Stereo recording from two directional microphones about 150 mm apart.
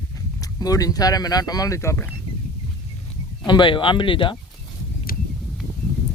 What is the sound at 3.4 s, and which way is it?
Speech, 30° left (ahead or behind).